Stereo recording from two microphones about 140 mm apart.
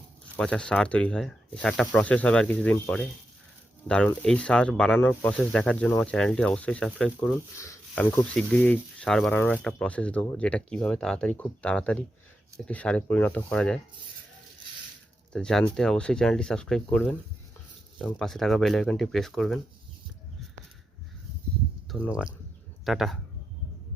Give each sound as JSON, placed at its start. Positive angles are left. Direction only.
{"t": 0.3, "sound": "speech", "side_deg": 5}
{"t": 7.5, "sound": "speech", "side_deg": 20}
{"t": 15.3, "sound": "speech", "side_deg": 5}
{"t": 22.1, "sound": "speech", "side_deg": -5}